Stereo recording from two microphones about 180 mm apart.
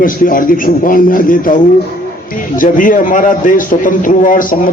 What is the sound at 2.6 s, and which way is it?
A man's voice, 50° left (ahead or behind).